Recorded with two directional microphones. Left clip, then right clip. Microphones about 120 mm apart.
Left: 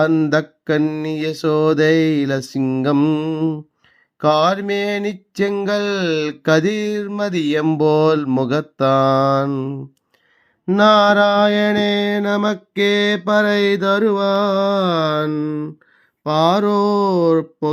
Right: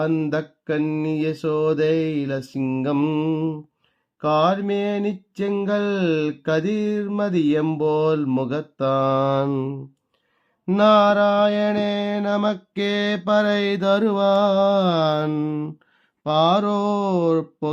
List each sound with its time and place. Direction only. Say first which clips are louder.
0.0 s a sound: left 7 dB; 25° left (ahead or behind)
2.8 s mantra: left 4 dB; 20° left (ahead or behind)
4.2 s a sound: left 4 dB; 30° left (ahead or behind)
9.5 s speech: left 2 dB; 5° left (ahead or behind)
10.8 s mantra: left 3 dB; 25° left (ahead or behind); by 15.3 s 5° right (ahead or behind)
15.3 s speech: left 3 dB; 20° right (ahead or behind)
16.2 s mantra: left 3 dB; 10° left (ahead or behind)